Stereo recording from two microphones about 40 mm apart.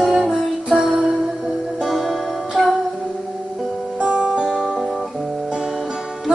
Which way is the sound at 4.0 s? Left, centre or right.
Right.